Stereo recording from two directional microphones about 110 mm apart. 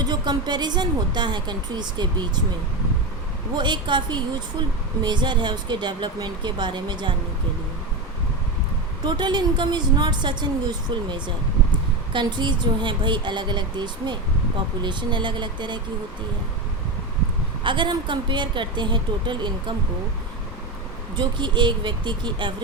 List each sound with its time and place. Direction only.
0.0 s speech: 40° right (ahead or behind)
3.5 s a woman's voice: 45° right (ahead or behind)
9.0 s a woman's voice: 45° right (ahead or behind)
17.6 s a woman's voice: 45° right (ahead or behind)
21.2 s a woman's voice: 45° right (ahead or behind)